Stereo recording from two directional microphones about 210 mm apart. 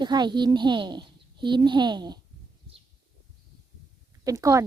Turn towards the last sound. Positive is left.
turn(degrees=-15)  # may be behind; listen again after turning